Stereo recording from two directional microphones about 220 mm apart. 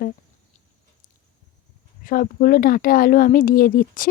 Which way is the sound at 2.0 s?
40° left (ahead or behind).